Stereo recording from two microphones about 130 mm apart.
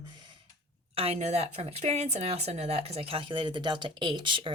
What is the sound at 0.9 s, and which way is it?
Speech, 50° right (ahead or behind).